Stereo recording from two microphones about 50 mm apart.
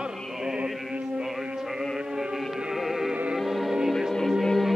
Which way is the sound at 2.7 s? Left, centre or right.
Centre.